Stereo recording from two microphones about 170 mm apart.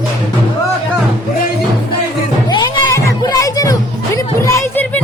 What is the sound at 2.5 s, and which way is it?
Music, 25° left (ahead or behind).